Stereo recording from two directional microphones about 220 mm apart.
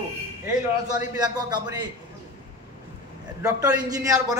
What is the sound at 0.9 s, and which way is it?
Speech, 20° right (ahead or behind).